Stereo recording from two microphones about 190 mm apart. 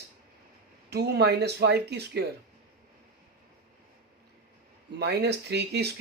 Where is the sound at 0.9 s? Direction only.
60° right (ahead or behind).